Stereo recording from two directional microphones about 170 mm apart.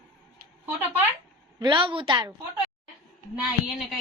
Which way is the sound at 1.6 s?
30° right (ahead or behind).